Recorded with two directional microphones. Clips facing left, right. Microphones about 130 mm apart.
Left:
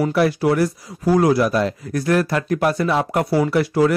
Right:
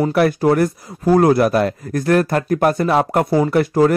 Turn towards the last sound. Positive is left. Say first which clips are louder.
# right 2 dB
turn(degrees=-45)  # may be behind; listen again after turning